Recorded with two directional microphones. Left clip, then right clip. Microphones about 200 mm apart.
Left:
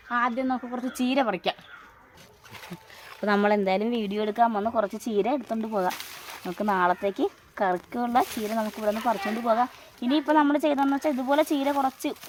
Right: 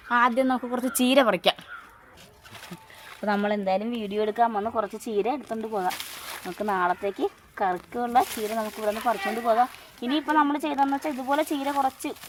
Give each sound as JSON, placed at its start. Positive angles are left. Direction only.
{"t": 0.1, "sound": "a woman's voice", "side_deg": -60}
{"t": 3.2, "sound": "speech", "side_deg": 55}